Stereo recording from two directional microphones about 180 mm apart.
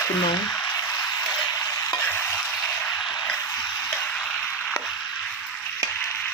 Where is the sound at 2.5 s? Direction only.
10° left (ahead or behind).